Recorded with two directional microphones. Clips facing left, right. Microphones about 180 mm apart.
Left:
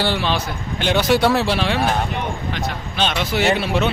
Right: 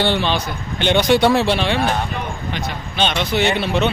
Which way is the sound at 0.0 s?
5° left (ahead or behind).